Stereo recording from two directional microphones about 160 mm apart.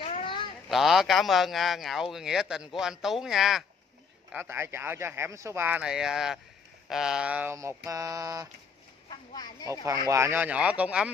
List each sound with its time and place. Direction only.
0.0 s a sound: 35° left (ahead or behind)
0.7 s a man's voice: centre (ahead or behind)
4.3 s a man's voice: 10° right (ahead or behind)
7.5 s a sound: 20° right (ahead or behind)
9.1 s speech: 25° left (ahead or behind)
9.7 s speech: 20° right (ahead or behind)